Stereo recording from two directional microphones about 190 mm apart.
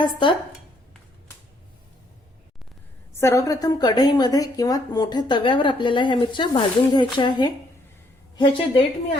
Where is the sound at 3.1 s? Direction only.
15° left (ahead or behind).